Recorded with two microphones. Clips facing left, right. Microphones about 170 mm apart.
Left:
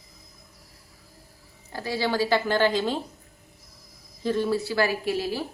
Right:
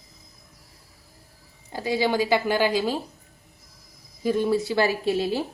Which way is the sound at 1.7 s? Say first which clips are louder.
Right 3 dB; 15° right (ahead or behind).